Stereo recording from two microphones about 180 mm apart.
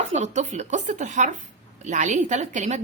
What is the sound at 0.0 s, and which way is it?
Speech, 40° right (ahead or behind).